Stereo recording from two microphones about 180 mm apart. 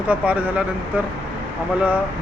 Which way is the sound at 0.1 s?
10° right (ahead or behind).